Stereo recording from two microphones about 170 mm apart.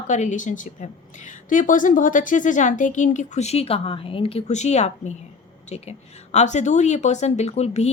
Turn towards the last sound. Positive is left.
turn(degrees=40)  # may be behind; listen again after turning